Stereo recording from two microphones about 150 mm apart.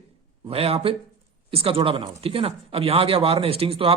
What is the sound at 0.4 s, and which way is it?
Speech, 40° right (ahead or behind).